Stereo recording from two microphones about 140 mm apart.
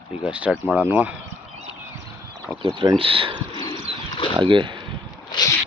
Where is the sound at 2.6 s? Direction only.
35° right (ahead or behind).